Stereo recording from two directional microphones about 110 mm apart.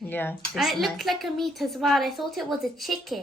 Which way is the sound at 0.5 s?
Centre (ahead or behind).